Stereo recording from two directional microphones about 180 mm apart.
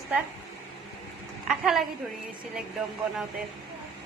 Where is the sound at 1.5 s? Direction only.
Centre (ahead or behind).